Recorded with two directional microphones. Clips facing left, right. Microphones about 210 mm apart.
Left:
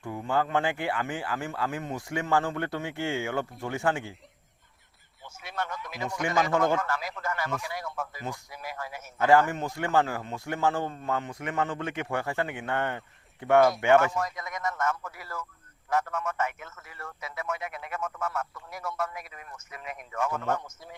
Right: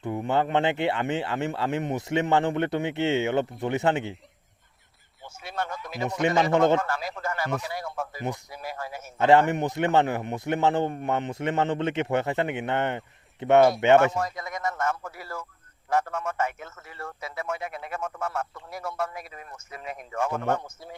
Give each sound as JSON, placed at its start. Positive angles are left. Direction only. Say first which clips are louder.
{"t": 0.0, "sound": "a man's voice", "louder": "right 3 dB", "side_deg": -20}
{"t": 5.4, "sound": "a man's voice", "louder": "right 2 dB", "side_deg": -30}